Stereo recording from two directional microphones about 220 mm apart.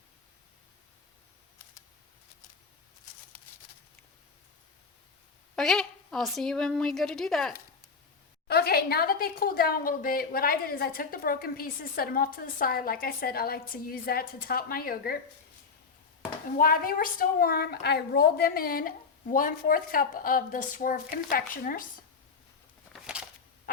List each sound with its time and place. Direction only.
5.5 s a woman's voice: centre (ahead or behind)
8.4 s a woman's voice: 45° left (ahead or behind)
16.6 s a woman's voice: 40° left (ahead or behind)
22.9 s a sound: 5° right (ahead or behind)